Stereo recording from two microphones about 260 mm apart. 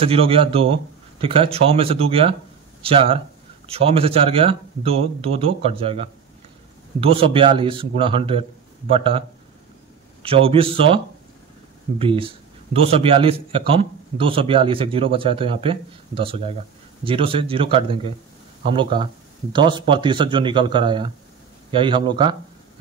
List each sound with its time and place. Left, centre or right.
0.0 s speech: right
10.2 s speech: right
12.0 s speech: right